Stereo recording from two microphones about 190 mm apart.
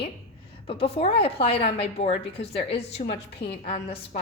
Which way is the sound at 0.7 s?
30° left (ahead or behind).